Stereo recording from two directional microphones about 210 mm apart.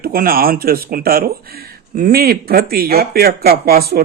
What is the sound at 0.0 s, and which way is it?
Speech, 45° right (ahead or behind).